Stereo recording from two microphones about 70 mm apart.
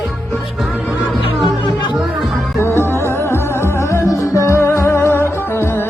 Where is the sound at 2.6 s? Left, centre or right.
Left.